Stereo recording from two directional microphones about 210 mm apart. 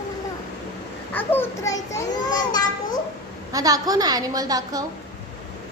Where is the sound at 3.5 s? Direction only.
15° right (ahead or behind).